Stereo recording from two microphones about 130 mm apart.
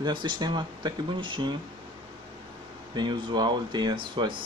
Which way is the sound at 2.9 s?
35° right (ahead or behind).